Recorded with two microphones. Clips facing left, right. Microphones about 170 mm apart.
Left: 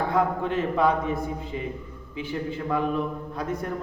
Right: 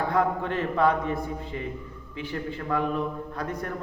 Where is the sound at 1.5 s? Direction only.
20° left (ahead or behind).